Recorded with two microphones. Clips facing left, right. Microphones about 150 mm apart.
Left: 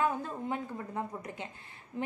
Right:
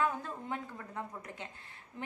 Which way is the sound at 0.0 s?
15° left (ahead or behind).